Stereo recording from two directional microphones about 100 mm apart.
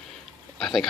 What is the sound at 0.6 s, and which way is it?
Speech, centre (ahead or behind).